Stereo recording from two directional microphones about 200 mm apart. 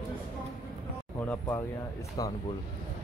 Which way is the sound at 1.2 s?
10° left (ahead or behind).